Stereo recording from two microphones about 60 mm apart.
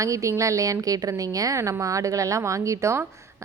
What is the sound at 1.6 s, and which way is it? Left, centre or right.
A woman's voice, right.